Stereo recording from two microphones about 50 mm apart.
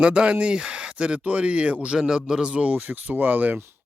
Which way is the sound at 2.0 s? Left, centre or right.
Centre.